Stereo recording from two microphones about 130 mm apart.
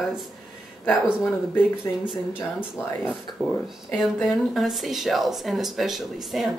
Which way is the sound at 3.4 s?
25° right (ahead or behind).